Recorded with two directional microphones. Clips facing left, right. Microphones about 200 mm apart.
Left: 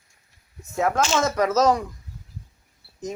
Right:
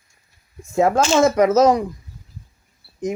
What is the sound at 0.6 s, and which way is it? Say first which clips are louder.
Speech: right 6 dB; 30° right (ahead or behind).